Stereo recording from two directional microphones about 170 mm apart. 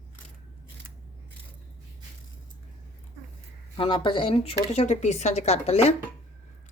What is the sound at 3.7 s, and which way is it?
Speech, 30° left (ahead or behind).